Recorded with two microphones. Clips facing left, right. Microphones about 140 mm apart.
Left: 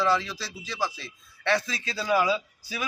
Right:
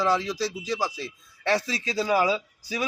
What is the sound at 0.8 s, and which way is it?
A man's voice, 40° right (ahead or behind).